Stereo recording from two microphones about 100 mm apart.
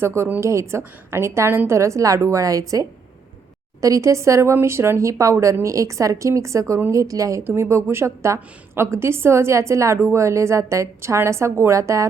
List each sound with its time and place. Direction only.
0.0 s a woman's voice: 25° right (ahead or behind)